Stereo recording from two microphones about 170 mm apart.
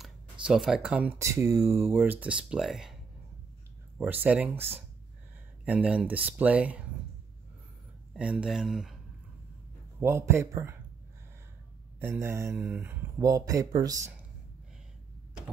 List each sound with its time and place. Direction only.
0.0 s speech: 5° right (ahead or behind)
4.0 s speech: 10° right (ahead or behind)
5.7 s speech: 5° right (ahead or behind)
8.1 s speech: 5° right (ahead or behind)
9.9 s speech: 15° right (ahead or behind)
12.0 s speech: 15° right (ahead or behind)